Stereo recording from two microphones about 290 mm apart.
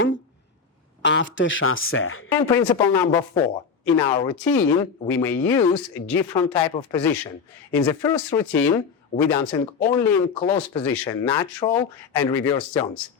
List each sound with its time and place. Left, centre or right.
1.0 s speech: left
2.4 s speech: centre